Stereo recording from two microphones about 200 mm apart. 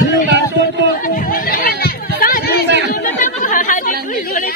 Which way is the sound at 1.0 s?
45° left (ahead or behind).